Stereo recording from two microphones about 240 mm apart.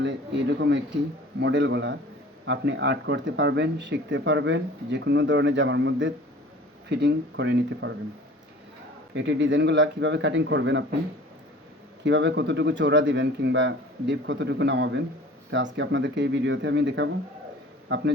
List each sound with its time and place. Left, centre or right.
0.0 s speech: right
9.1 s speech: right
12.0 s a man's voice: right